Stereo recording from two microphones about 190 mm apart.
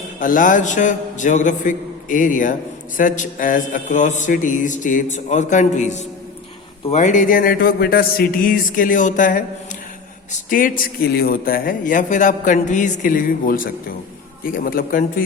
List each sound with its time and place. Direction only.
0.2 s a man's voice: 45° left (ahead or behind)
10.5 s a man's voice: 50° left (ahead or behind)